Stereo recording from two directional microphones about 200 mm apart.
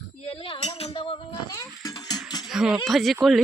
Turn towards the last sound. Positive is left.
turn(degrees=0)  # may be behind; listen again after turning